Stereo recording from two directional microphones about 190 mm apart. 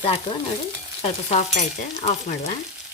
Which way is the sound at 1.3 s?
35° left (ahead or behind).